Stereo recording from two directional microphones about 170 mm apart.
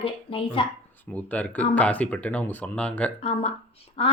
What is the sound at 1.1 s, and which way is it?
Speech, 10° left (ahead or behind).